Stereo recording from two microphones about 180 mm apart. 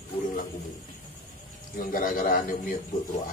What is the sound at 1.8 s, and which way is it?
Speech, 50° left (ahead or behind).